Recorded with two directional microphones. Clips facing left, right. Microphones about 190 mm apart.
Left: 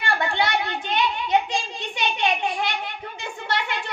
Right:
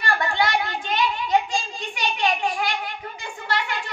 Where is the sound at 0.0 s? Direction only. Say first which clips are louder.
Right 1 dB; 20° left (ahead or behind).